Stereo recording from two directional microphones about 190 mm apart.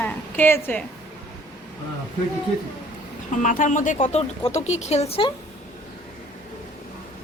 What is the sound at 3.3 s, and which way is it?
Speech, 40° left (ahead or behind).